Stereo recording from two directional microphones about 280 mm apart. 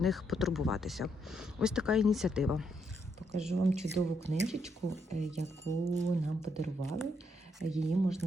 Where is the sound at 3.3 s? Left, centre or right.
Right.